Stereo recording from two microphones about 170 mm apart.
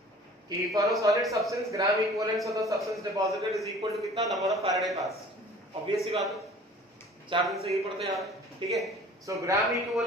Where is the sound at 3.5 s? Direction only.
Centre (ahead or behind).